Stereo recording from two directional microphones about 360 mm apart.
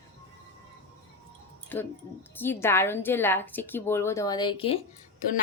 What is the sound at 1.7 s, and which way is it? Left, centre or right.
A woman's voice, centre.